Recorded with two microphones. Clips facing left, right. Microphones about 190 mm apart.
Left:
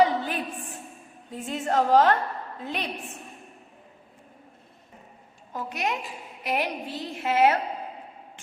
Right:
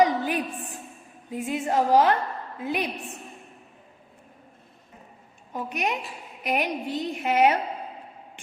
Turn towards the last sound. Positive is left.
turn(degrees=-20)  # may be behind; listen again after turning